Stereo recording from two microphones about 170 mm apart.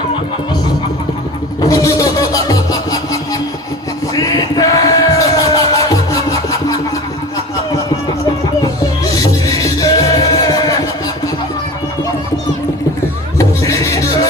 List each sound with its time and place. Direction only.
1.6 s music: 20° left (ahead or behind)
8.6 s music: 20° left (ahead or behind)
13.4 s music: 20° left (ahead or behind)